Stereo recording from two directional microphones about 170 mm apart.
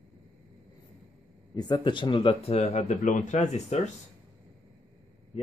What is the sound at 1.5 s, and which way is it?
Speech, 25° left (ahead or behind).